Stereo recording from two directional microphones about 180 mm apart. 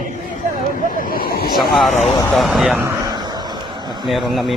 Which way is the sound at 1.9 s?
40° left (ahead or behind).